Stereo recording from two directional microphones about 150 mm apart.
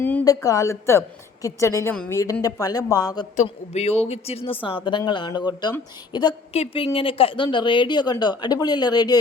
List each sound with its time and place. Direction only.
0.3 s speech: 20° left (ahead or behind)
3.3 s a woman's voice: 45° left (ahead or behind); by 6.3 s 30° left (ahead or behind)
6.5 s speech: 40° left (ahead or behind)